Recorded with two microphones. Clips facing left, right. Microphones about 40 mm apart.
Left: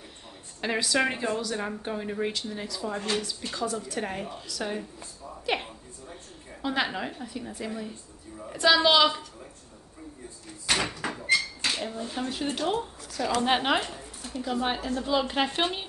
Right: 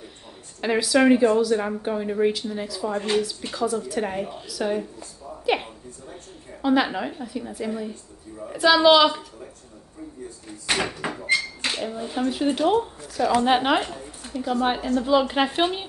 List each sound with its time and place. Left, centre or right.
0.6 s speech: centre
5.4 s a sound: centre
6.6 s speech: centre
10.7 s door: right
11.7 s a woman's voice: centre